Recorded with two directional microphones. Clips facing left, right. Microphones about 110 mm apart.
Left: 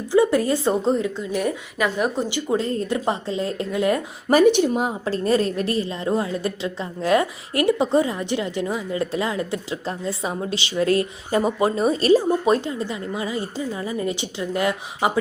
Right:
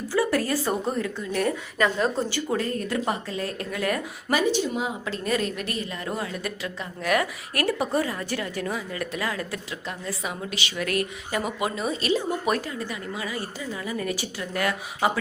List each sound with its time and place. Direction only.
0.1 s a woman's voice: 20° left (ahead or behind)
4.4 s speech: 65° left (ahead or behind)
5.0 s a woman's voice: 35° left (ahead or behind)
12.5 s a woman's voice: 25° left (ahead or behind)